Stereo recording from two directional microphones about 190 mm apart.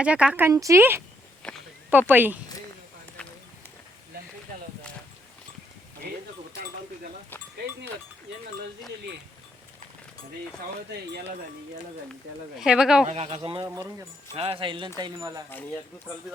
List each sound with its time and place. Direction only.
0.0 s a woman's voice: 5° right (ahead or behind)
1.4 s a sound: 5° left (ahead or behind)
1.9 s a woman's voice: 10° right (ahead or behind)
12.5 s speech: 5° right (ahead or behind)
13.1 s speech: 30° right (ahead or behind)